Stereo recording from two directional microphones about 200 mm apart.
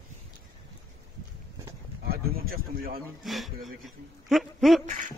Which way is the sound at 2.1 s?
50° right (ahead or behind).